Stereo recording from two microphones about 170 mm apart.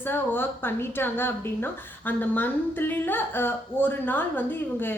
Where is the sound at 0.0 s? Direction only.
10° left (ahead or behind).